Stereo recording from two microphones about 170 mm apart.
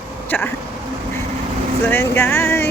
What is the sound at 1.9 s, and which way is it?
Speech, 15° left (ahead or behind).